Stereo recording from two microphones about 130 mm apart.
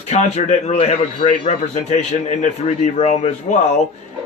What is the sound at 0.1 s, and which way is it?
A man's voice, 65° left (ahead or behind).